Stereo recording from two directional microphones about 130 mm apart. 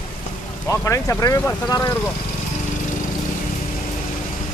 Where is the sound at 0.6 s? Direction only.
20° left (ahead or behind).